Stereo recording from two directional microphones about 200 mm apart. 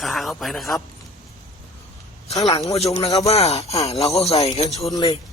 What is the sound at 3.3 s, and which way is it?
Speech, 30° left (ahead or behind).